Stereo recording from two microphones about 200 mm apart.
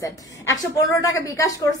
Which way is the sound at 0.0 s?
15° left (ahead or behind).